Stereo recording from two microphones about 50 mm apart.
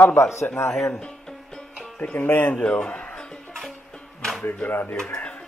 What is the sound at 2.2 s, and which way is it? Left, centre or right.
Speech, left.